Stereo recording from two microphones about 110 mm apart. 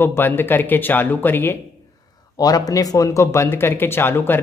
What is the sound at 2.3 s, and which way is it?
Speech, 35° left (ahead or behind).